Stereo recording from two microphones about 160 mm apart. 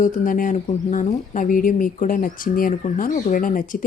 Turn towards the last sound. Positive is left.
turn(degrees=55)  # may be behind; listen again after turning